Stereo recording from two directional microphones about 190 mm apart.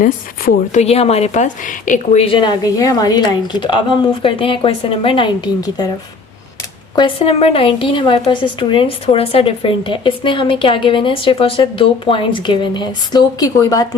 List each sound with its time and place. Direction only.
0.0 s a woman's voice: 40° left (ahead or behind)
2.2 s a woman's voice: 25° left (ahead or behind)
6.9 s a woman's voice: 25° left (ahead or behind)